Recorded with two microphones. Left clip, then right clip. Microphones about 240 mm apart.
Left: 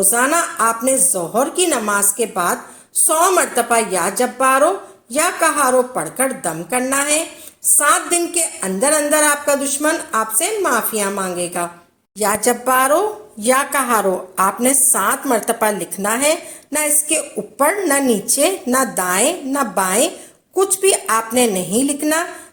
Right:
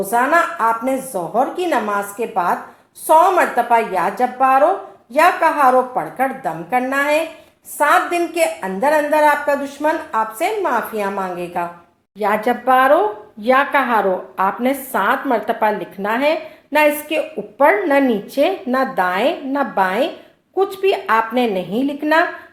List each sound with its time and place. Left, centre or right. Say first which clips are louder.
0.1 s a woman's voice: right 6 dB; left